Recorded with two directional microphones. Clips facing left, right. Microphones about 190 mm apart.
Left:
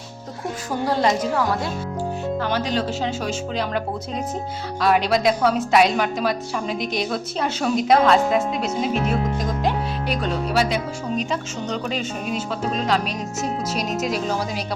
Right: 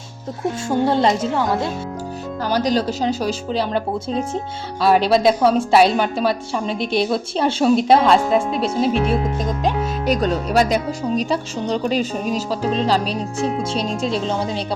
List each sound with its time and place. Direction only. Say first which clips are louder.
0.9 s speech: even; 25° right (ahead or behind)
2.4 s speech: right 7 dB; 40° right (ahead or behind)
10.1 s speech: right 6 dB; 40° right (ahead or behind)